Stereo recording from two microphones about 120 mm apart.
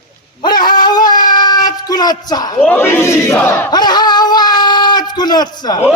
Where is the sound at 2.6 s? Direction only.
20° left (ahead or behind).